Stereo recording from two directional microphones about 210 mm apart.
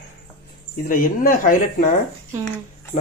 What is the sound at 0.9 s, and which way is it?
Speech, 40° left (ahead or behind).